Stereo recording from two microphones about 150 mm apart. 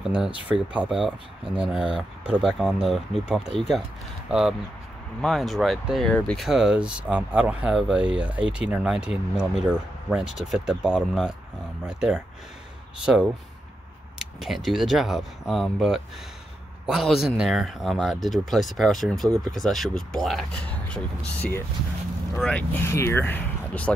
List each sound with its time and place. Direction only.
0.3 s speech: 35° left (ahead or behind)
0.7 s speech: 5° right (ahead or behind); by 23.9 s 10° left (ahead or behind)